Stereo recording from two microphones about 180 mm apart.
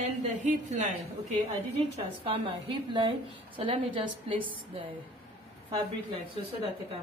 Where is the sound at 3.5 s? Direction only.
30° right (ahead or behind).